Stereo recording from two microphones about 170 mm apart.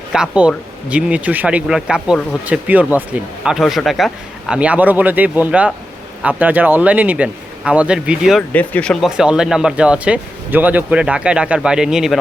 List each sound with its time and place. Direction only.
0.1 s speech: 5° right (ahead or behind)
8.5 s speech: 5° left (ahead or behind)